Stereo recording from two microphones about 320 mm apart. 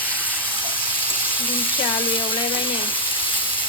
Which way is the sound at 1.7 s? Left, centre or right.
Centre.